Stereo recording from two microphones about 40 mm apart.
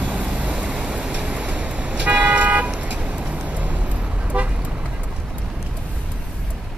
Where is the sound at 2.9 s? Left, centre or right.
Right.